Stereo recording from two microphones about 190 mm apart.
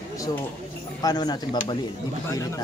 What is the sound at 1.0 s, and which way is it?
Speech, 20° left (ahead or behind).